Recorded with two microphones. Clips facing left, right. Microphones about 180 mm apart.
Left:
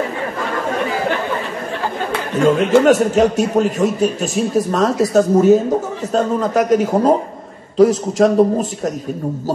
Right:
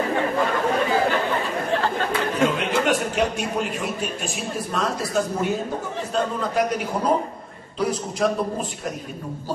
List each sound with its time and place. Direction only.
2.5 s a man's voice: 45° left (ahead or behind)
8.2 s a man's voice: 40° left (ahead or behind)